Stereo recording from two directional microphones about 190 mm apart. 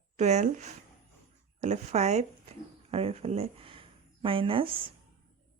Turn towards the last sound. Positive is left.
turn(degrees=-30)  # may be behind; listen again after turning